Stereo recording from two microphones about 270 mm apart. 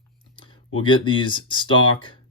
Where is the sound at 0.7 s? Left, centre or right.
Centre.